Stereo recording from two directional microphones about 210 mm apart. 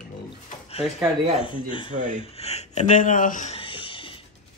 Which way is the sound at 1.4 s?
25° left (ahead or behind).